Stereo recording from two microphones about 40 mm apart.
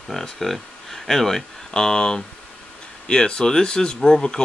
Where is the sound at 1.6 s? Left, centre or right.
Centre.